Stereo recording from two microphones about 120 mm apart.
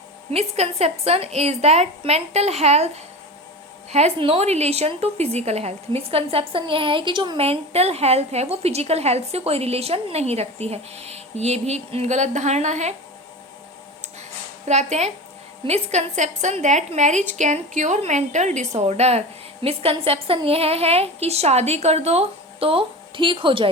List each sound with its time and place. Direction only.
0.3 s a woman's voice: 60° right (ahead or behind); by 7.3 s 40° right (ahead or behind)
7.3 s a woman's voice: 55° right (ahead or behind); by 12.9 s 75° right (ahead or behind)
14.7 s a woman's voice: 70° right (ahead or behind); by 23.6 s 45° right (ahead or behind)